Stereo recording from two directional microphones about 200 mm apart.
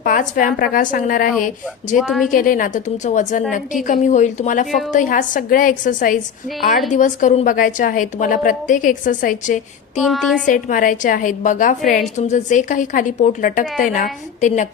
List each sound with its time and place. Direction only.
0.0 s a woman's voice: 40° left (ahead or behind)
2.0 s a woman's voice: centre (ahead or behind)
2.3 s a woman's voice: 45° left (ahead or behind)
10.0 s a woman's voice: centre (ahead or behind)
10.4 s a woman's voice: 40° left (ahead or behind)